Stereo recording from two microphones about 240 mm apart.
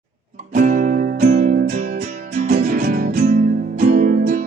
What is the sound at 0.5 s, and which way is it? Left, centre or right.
Music, right.